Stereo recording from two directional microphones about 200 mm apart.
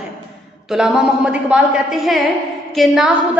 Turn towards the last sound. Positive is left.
turn(degrees=0)  # may be behind; listen again after turning